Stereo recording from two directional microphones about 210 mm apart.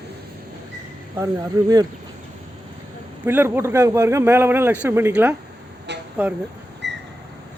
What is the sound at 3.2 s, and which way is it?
Speech, 10° right (ahead or behind).